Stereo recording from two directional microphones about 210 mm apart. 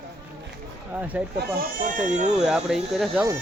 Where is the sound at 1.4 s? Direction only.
40° right (ahead or behind).